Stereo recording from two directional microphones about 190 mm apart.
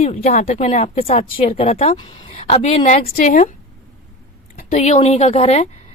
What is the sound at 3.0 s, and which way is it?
Speech, 45° left (ahead or behind).